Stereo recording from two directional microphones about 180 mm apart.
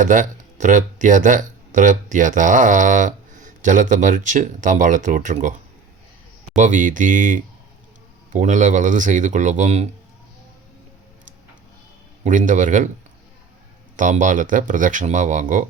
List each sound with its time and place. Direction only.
0.0 s speech: 45° right (ahead or behind)
6.6 s speech: 45° right (ahead or behind)
12.2 s speech: 45° right (ahead or behind)
13.9 s speech: 45° right (ahead or behind)